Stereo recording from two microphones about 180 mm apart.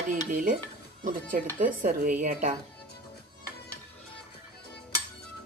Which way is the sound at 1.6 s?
50° right (ahead or behind).